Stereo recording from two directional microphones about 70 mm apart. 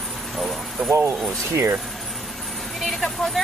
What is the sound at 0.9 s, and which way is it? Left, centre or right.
Speech, right.